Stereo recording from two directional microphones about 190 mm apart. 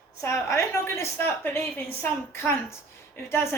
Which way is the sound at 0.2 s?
15° left (ahead or behind).